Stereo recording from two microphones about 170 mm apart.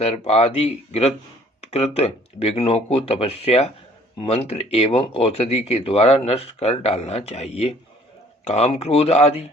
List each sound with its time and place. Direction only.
0.0 s speech: 35° left (ahead or behind)